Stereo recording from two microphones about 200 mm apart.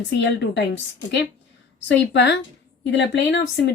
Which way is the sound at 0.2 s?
60° left (ahead or behind).